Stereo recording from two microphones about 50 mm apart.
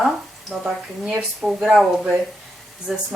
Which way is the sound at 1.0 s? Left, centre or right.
Centre.